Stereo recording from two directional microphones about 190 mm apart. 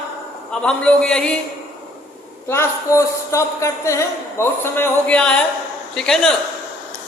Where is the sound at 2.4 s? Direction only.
15° left (ahead or behind).